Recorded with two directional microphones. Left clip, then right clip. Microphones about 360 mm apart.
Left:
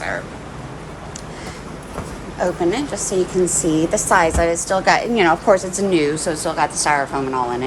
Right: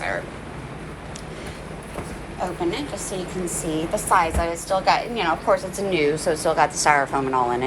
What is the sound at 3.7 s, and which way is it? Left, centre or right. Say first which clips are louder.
A woman's voice: left 2 dB; left.